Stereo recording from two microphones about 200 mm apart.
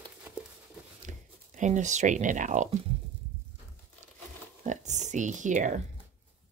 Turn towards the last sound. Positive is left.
turn(degrees=-40)  # may be behind; listen again after turning